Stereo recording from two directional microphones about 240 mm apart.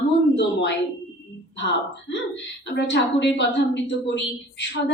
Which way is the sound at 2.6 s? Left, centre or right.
Left.